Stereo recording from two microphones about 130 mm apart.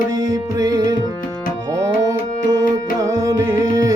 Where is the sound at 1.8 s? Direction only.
25° right (ahead or behind).